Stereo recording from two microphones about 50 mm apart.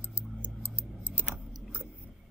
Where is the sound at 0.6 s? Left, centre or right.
Left.